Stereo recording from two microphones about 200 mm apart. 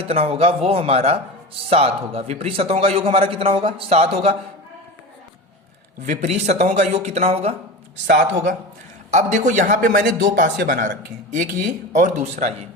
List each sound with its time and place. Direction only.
0.0 s a man's voice: 30° right (ahead or behind)
6.0 s speech: 35° right (ahead or behind)
8.0 s speech: 55° right (ahead or behind)
9.0 s speech: 35° right (ahead or behind)